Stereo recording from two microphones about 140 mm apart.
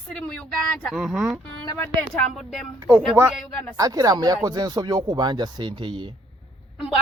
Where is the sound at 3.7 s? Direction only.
25° right (ahead or behind).